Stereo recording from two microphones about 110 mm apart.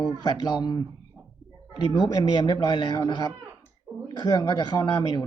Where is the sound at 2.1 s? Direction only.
40° left (ahead or behind).